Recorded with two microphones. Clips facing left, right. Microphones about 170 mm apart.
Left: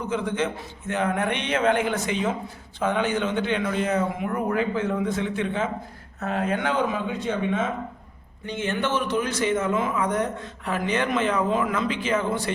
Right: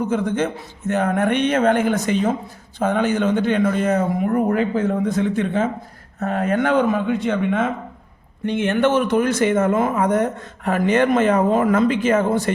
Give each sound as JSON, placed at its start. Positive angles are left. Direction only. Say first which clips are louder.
{"t": 0.0, "sound": "speech", "louder": "right 5 dB", "side_deg": -45}